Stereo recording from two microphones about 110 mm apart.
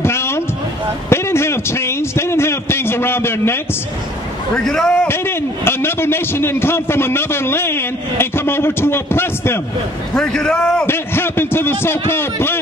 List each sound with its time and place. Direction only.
0.0 s a sound: 25° left (ahead or behind)
4.6 s a man's voice: 5° left (ahead or behind)
4.9 s a man's voice: 20° left (ahead or behind)
10.1 s a man's voice: 10° left (ahead or behind)
10.9 s a man's voice: 20° left (ahead or behind)